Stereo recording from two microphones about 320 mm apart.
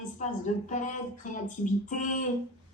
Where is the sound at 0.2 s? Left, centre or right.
Left.